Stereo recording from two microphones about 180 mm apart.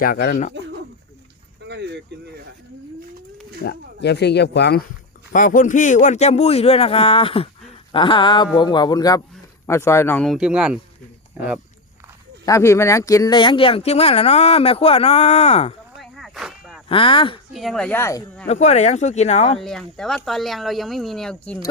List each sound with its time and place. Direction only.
0.0 s speech: 55° left (ahead or behind)
1.6 s a sound: 70° right (ahead or behind)
3.6 s speech: 70° left (ahead or behind)
5.3 s a man's voice: 45° left (ahead or behind); by 10.2 s 15° left (ahead or behind)
10.2 s speech: 5° right (ahead or behind)
12.5 s speech: 15° left (ahead or behind); by 15.7 s 35° left (ahead or behind)
16.0 s a sound: centre (ahead or behind)
16.9 s a man's voice: 30° left (ahead or behind)
17.5 s speech: centre (ahead or behind); by 18.3 s 15° left (ahead or behind)
18.4 s speech: 40° left (ahead or behind)
19.6 s speech: 5° left (ahead or behind)